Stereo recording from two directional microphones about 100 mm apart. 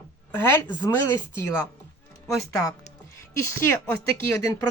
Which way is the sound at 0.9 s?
30° left (ahead or behind).